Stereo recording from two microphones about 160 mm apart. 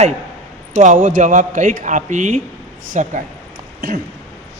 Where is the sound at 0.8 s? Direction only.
55° right (ahead or behind).